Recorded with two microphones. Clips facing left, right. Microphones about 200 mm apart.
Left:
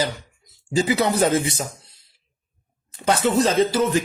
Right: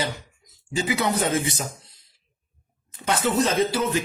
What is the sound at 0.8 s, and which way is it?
Speech, 35° left (ahead or behind).